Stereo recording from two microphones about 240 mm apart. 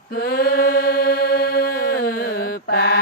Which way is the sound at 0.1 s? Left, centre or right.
Left.